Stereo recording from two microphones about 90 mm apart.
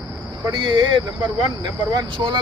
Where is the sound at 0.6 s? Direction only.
65° right (ahead or behind).